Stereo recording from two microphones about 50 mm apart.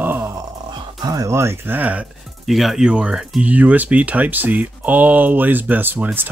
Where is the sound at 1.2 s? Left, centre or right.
Right.